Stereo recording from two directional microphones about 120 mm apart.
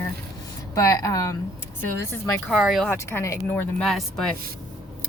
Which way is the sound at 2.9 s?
20° left (ahead or behind).